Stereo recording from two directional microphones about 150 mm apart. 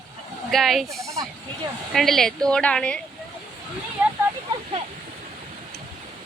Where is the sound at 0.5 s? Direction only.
Centre (ahead or behind).